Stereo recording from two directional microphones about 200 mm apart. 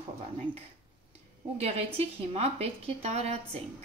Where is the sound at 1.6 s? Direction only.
30° right (ahead or behind).